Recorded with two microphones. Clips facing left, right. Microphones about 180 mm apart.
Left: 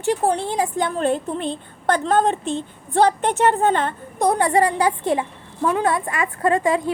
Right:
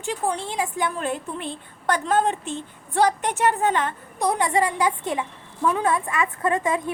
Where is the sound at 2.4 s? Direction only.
20° left (ahead or behind).